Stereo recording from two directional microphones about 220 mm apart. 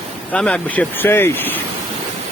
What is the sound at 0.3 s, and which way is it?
Speech, 5° left (ahead or behind).